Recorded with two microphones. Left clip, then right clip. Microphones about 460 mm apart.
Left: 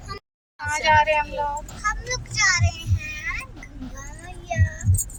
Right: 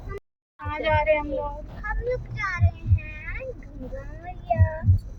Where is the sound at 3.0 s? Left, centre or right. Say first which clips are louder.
Left 8 dB; right.